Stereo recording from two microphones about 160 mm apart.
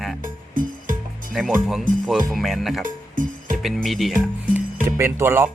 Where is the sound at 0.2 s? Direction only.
60° right (ahead or behind).